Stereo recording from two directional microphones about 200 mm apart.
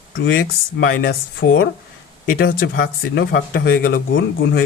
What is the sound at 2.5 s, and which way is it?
Speech, 45° left (ahead or behind).